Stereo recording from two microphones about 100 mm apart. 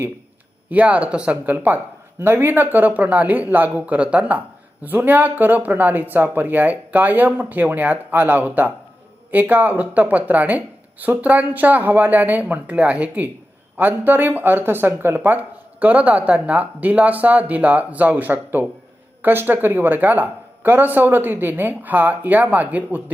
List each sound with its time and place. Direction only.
0.7 s speech: 15° right (ahead or behind)